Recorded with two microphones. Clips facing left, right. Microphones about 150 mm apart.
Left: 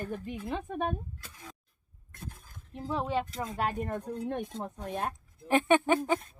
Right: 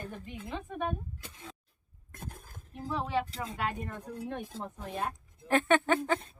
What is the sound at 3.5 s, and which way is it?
Speech, 45° left (ahead or behind).